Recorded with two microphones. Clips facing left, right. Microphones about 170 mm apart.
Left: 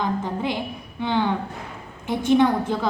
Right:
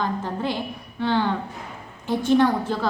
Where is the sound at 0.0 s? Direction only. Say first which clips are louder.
Left 1 dB; 15° left (ahead or behind).